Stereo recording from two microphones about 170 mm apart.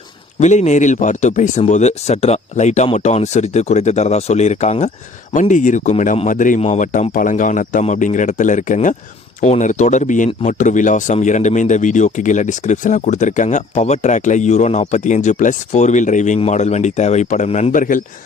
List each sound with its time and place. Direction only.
0.3 s speech: 45° left (ahead or behind)